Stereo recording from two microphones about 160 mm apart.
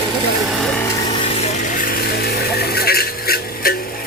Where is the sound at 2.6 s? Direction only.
75° left (ahead or behind).